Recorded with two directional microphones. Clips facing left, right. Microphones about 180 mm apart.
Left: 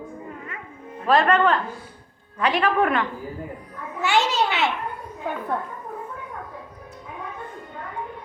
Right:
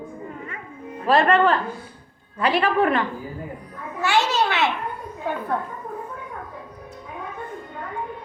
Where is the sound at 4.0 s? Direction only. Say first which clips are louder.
Even; 20° left (ahead or behind).